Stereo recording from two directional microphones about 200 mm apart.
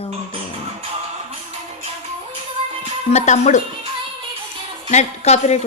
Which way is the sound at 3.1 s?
35° left (ahead or behind).